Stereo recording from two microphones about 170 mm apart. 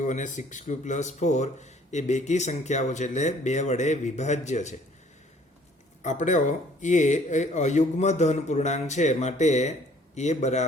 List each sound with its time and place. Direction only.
0.0 s speech: 45° left (ahead or behind)
6.0 s a man's voice: 45° left (ahead or behind)